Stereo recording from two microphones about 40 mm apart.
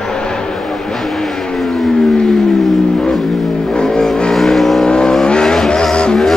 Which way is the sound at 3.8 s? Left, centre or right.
Centre.